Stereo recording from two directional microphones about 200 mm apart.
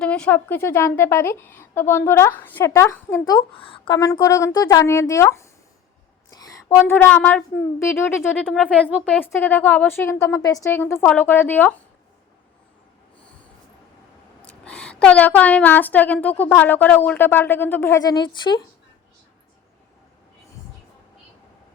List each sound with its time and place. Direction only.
0.0 s speech: 5° left (ahead or behind)
6.3 s a sound: 20° left (ahead or behind)
6.7 s speech: 10° left (ahead or behind)
14.4 s speech: 5° left (ahead or behind); by 18.6 s 25° left (ahead or behind)